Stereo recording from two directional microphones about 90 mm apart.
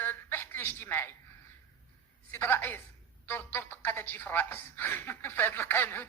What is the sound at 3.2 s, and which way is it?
A woman's voice, 25° left (ahead or behind).